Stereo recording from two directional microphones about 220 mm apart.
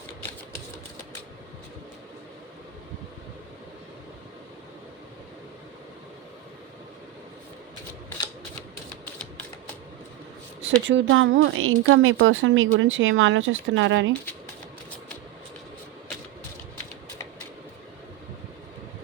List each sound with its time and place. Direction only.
10.8 s a woman's voice: 60° right (ahead or behind)